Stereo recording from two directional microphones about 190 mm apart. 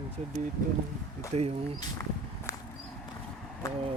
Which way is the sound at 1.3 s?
35° right (ahead or behind).